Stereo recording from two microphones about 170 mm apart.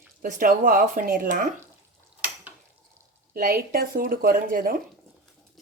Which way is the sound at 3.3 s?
60° right (ahead or behind).